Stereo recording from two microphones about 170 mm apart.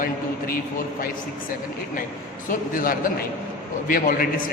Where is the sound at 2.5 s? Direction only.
55° left (ahead or behind).